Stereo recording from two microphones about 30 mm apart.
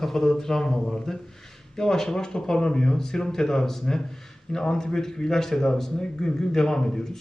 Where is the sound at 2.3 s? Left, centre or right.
Left.